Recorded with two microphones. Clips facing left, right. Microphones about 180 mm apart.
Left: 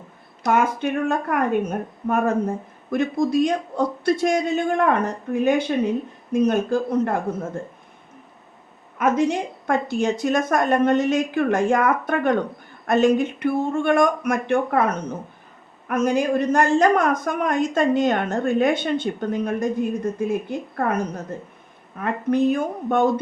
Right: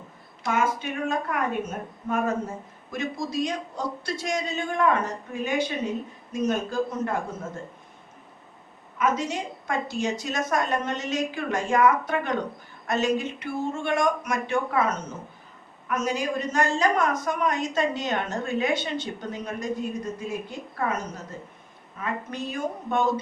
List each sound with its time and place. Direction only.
0.5 s a woman's voice: 55° left (ahead or behind)
9.0 s a woman's voice: 55° left (ahead or behind)
22.0 s a woman's voice: 55° left (ahead or behind)